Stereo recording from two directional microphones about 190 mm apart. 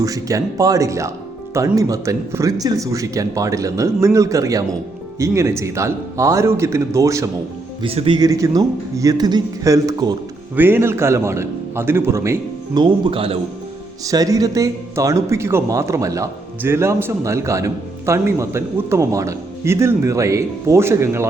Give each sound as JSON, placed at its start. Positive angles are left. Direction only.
{"t": 0.0, "sound": "speech", "side_deg": -20}
{"t": 7.8, "sound": "a man's voice", "side_deg": -30}
{"t": 14.0, "sound": "speech", "side_deg": -20}